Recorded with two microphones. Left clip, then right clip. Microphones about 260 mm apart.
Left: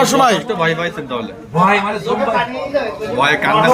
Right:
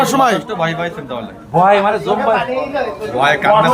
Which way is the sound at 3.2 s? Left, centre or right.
Centre.